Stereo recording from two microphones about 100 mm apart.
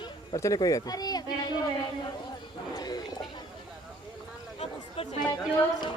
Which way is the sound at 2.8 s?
40° left (ahead or behind).